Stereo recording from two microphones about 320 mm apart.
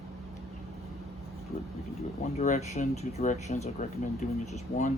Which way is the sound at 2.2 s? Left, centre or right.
Left.